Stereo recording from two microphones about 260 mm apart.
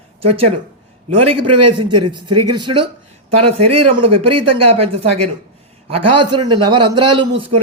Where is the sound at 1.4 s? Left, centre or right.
Right.